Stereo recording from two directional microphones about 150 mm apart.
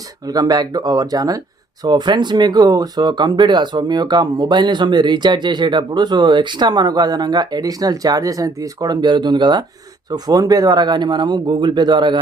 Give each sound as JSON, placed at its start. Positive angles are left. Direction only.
{"t": 0.3, "sound": "speech", "side_deg": -25}